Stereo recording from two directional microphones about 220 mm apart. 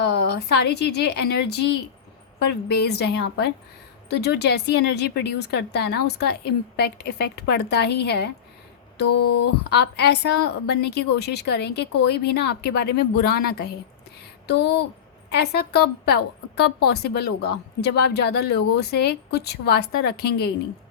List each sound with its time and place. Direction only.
0.0 s a woman's voice: 50° left (ahead or behind)
2.5 s a woman's voice: 50° left (ahead or behind)
9.1 s a sound: 90° left
9.6 s a woman's voice: 50° left (ahead or behind)